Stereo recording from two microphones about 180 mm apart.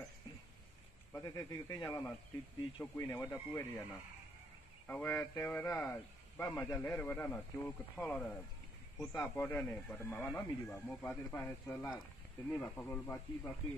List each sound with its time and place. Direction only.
1.1 s a man's voice: 20° left (ahead or behind)